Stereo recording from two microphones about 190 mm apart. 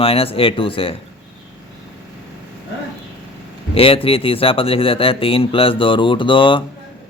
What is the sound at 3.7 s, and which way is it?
Speech, 30° left (ahead or behind).